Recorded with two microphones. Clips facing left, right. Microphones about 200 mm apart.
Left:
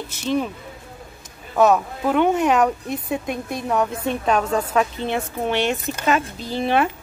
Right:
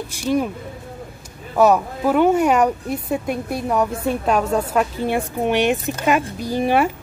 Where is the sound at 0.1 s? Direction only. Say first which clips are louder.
Right 2 dB; 10° right (ahead or behind).